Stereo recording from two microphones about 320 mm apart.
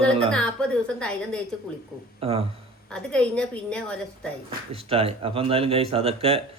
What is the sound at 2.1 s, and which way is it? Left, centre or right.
Speech, centre.